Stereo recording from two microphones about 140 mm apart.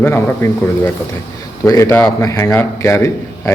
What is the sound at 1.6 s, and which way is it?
A man's voice, 20° left (ahead or behind).